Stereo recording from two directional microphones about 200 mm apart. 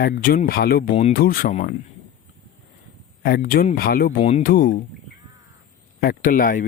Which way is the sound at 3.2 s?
45° left (ahead or behind).